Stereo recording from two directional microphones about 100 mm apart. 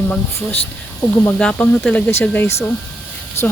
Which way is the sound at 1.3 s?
10° left (ahead or behind).